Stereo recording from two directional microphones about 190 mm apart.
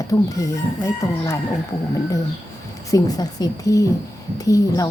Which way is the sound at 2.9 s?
20° left (ahead or behind).